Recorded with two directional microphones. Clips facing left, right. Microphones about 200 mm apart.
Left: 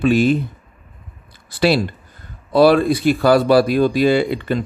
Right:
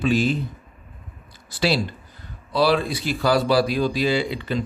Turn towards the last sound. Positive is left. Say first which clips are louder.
# left 6 dB
turn(degrees=55)  # may be behind; listen again after turning